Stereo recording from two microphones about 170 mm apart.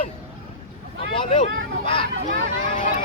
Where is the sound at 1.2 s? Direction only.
35° left (ahead or behind).